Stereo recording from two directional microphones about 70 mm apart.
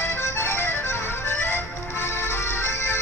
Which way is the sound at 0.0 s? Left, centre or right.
Left.